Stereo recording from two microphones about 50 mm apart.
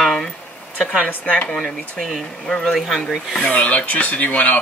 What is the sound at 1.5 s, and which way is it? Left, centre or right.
Speech, centre.